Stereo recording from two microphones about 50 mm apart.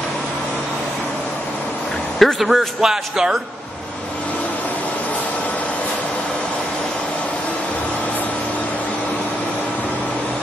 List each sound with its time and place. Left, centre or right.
2.1 s a man's voice: centre